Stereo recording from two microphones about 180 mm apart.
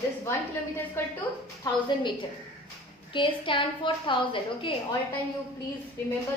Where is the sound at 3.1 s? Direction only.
30° left (ahead or behind).